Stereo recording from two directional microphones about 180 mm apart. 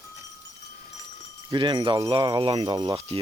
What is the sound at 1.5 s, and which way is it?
Speech, 25° right (ahead or behind).